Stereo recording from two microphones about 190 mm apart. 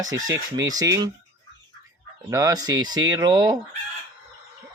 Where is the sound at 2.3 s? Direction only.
20° right (ahead or behind).